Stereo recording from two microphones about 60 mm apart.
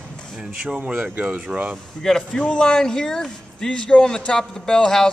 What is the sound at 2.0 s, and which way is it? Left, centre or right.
A man's voice, centre.